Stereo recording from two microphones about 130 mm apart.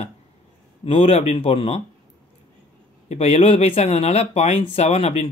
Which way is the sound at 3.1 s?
55° left (ahead or behind).